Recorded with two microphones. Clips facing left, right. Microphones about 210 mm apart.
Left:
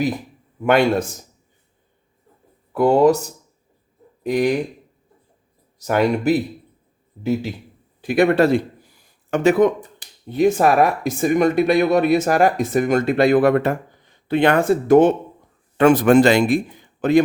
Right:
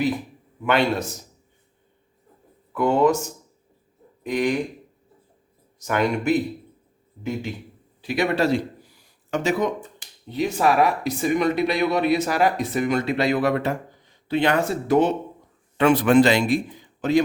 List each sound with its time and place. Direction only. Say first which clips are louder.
0.6 s speech: left 5 dB; 45° left (ahead or behind)
2.7 s speech: left 5 dB; 35° left (ahead or behind)
5.8 s speech: left 5 dB; 35° left (ahead or behind)
8.0 s speech: left 6 dB; 50° left (ahead or behind)